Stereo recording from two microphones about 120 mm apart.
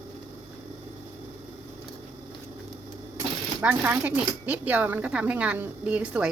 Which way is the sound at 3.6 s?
15° right (ahead or behind).